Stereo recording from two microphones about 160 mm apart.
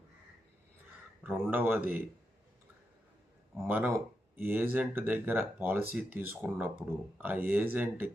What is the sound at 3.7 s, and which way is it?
Speech, 10° right (ahead or behind).